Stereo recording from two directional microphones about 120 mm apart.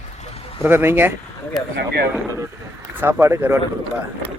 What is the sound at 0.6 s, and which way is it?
Speech, 15° right (ahead or behind).